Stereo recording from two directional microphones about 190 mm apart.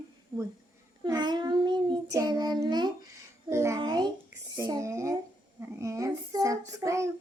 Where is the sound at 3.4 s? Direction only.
15° right (ahead or behind).